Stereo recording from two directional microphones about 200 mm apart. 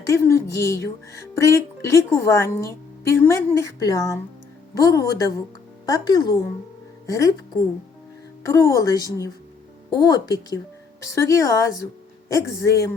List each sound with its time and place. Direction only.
0.1 s a woman's voice: 15° left (ahead or behind)